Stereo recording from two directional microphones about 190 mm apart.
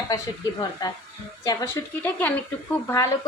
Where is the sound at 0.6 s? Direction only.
20° left (ahead or behind).